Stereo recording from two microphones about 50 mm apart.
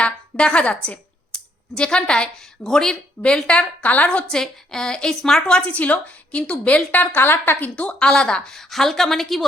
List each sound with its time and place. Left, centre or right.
0.0 s speech: left
3.2 s a woman's voice: left
4.3 s a woman's voice: centre
5.5 s a woman's voice: left
6.9 s a woman's voice: left
7.8 s a woman's voice: centre
8.5 s a woman's voice: centre